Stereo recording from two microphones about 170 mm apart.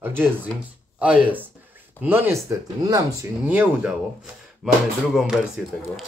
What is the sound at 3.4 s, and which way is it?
Speech, 5° right (ahead or behind).